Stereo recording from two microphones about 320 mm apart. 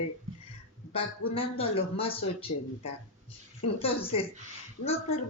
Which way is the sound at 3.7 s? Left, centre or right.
Centre.